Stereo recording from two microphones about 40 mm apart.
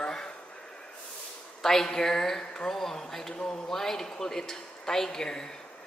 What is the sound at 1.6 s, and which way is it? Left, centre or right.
Speech, centre.